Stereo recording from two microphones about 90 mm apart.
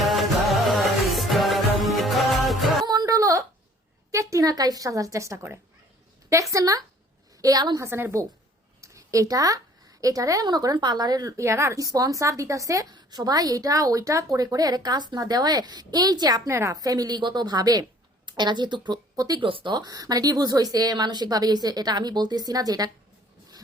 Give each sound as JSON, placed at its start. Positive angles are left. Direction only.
{"t": 0.0, "sound": "music", "side_deg": 0}
{"t": 2.8, "sound": "music", "side_deg": -50}
{"t": 4.1, "sound": "a woman's voice", "side_deg": -35}
{"t": 7.8, "sound": "a woman's voice", "side_deg": -25}
{"t": 8.8, "sound": "a sound", "side_deg": -35}
{"t": 10.0, "sound": "a woman's voice", "side_deg": -40}
{"t": 12.9, "sound": "a woman's voice", "side_deg": -50}
{"t": 16.5, "sound": "a woman's voice", "side_deg": -30}
{"t": 16.7, "sound": "a woman's voice", "side_deg": -45}
{"t": 18.3, "sound": "speech", "side_deg": -55}
{"t": 19.1, "sound": "speech", "side_deg": -45}
{"t": 19.4, "sound": "speech", "side_deg": -75}
{"t": 19.7, "sound": "a woman's voice", "side_deg": -45}